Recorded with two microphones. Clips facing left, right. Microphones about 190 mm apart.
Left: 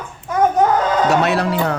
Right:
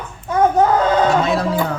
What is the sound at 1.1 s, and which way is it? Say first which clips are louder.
Speech: left 1 dB; 70° left (ahead or behind).